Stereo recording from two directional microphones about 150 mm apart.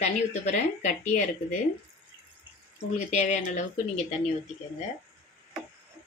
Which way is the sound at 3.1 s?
50° left (ahead or behind).